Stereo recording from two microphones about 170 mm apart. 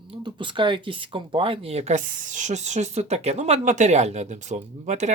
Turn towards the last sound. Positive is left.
turn(degrees=-45)  # may be behind; listen again after turning